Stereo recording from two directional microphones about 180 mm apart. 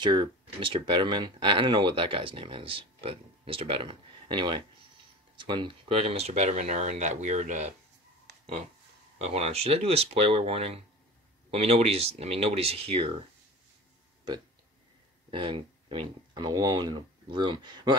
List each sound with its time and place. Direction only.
0.0 s speech: 25° right (ahead or behind)
9.2 s speech: 35° right (ahead or behind)
15.3 s speech: 30° right (ahead or behind)